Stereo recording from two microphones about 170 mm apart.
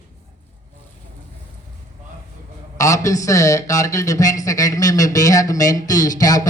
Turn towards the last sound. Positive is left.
turn(degrees=20)  # may be behind; listen again after turning